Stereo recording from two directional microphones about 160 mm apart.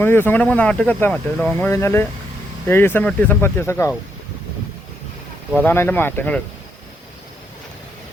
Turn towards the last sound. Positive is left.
turn(degrees=10)  # may be behind; listen again after turning